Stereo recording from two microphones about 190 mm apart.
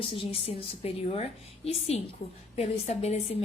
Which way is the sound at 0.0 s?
30° left (ahead or behind).